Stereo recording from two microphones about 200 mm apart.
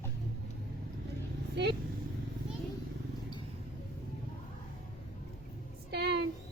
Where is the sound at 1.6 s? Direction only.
55° right (ahead or behind).